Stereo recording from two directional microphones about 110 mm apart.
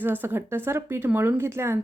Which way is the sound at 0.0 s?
20° right (ahead or behind).